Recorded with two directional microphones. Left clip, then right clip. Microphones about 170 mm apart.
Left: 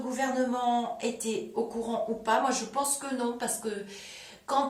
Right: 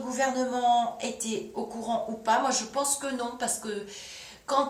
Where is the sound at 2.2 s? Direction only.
15° right (ahead or behind).